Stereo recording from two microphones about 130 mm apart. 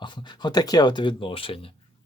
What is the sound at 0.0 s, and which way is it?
Speech, 35° left (ahead or behind).